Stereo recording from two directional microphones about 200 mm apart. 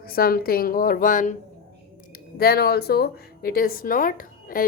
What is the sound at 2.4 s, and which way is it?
A woman's voice, 50° left (ahead or behind).